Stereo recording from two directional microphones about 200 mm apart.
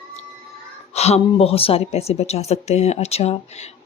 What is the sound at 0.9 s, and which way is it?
Speech, 30° left (ahead or behind).